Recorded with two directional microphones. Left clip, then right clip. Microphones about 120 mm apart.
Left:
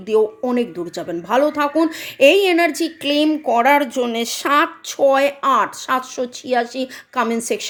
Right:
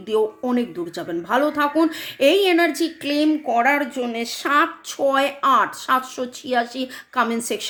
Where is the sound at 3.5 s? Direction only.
90° left.